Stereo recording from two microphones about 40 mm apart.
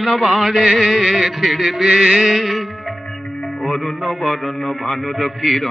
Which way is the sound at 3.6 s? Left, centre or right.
Centre.